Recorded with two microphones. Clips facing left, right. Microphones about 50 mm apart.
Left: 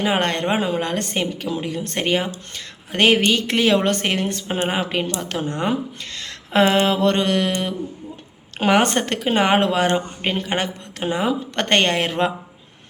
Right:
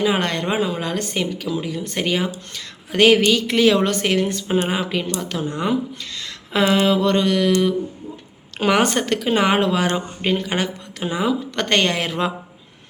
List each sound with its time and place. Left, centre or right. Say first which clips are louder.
0.0 s a woman's voice: even; left
6.1 s a sound: left 3 dB; left
6.7 s speech: even; left